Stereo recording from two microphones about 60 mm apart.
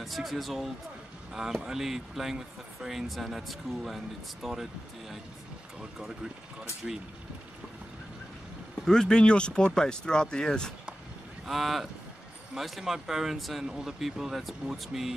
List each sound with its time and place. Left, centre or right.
0.0 s speech: centre
5.8 s speech: centre
8.8 s speech: centre
11.4 s speech: centre